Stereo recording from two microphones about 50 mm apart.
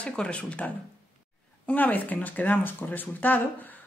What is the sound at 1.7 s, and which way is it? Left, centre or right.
A woman's voice, left.